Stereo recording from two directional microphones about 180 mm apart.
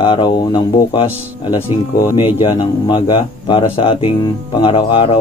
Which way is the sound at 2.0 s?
25° left (ahead or behind).